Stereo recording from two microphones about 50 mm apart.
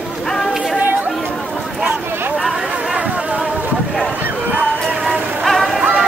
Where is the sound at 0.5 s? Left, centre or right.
Centre.